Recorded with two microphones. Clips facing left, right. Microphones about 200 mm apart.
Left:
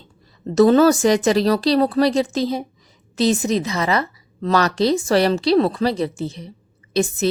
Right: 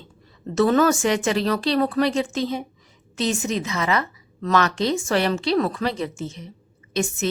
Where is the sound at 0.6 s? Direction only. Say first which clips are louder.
Left 5 dB; 35° left (ahead or behind).